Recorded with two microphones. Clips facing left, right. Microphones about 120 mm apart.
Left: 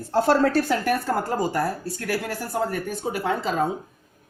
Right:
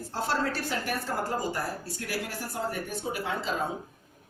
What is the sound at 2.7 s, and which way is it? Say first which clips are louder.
Speech: left 6 dB; 50° left (ahead or behind).